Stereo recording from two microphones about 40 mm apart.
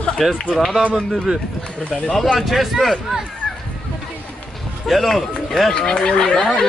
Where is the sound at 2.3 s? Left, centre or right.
Centre.